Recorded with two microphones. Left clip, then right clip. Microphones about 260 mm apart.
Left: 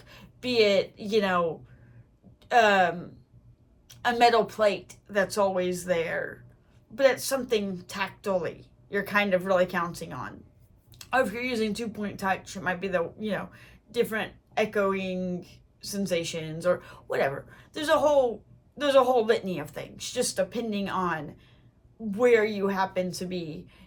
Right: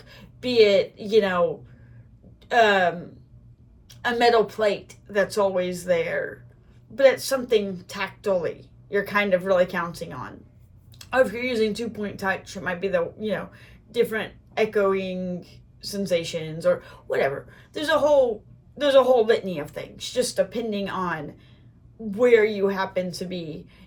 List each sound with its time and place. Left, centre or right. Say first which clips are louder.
0.0 s speech: right 4 dB; centre
2.5 s speech: right 2 dB; centre